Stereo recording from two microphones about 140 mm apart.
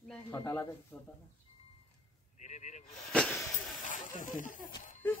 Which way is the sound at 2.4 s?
55° left (ahead or behind).